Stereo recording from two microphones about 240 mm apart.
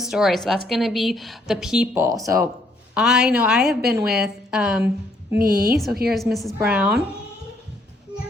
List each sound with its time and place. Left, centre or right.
0.0 s a woman's voice: centre
2.9 s speech: centre
5.4 s a woman's voice: right
6.1 s speech: centre